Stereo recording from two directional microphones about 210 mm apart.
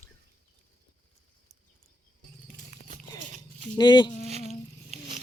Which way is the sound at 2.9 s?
35° right (ahead or behind).